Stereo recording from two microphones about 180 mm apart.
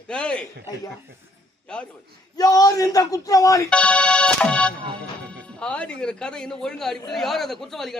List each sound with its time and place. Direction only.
0.1 s speech: 5° left (ahead or behind)
1.7 s speech: 5° left (ahead or behind)
2.3 s speech: 20° left (ahead or behind)
3.7 s music: 5° left (ahead or behind)
4.9 s speech: 5° left (ahead or behind)